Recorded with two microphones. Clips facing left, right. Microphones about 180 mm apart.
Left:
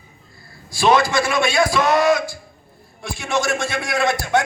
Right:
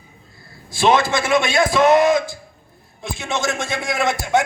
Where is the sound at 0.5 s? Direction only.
20° right (ahead or behind).